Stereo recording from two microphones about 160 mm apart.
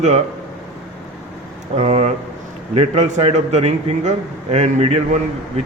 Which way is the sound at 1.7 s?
40° right (ahead or behind).